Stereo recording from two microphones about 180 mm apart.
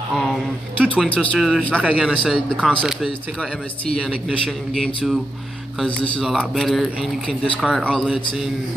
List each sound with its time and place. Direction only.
0.2 s speech: centre (ahead or behind)